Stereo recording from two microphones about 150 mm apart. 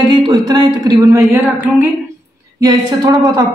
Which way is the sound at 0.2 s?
25° right (ahead or behind).